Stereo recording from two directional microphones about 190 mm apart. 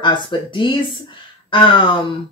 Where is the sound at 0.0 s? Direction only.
25° left (ahead or behind).